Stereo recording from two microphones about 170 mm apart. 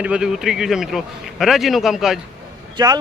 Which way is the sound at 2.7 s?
25° right (ahead or behind).